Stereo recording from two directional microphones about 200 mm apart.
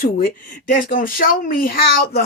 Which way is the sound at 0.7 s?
40° left (ahead or behind).